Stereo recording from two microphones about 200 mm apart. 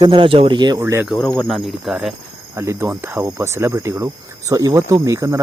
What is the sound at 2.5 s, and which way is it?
Cricket, 15° right (ahead or behind).